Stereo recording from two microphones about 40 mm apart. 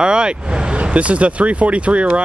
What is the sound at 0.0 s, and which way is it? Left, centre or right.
Speech, right.